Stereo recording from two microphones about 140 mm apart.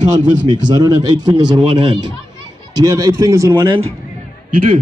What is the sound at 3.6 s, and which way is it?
Speech, 45° right (ahead or behind).